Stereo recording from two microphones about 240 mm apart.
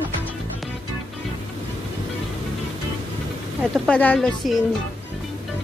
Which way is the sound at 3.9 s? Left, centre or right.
Centre.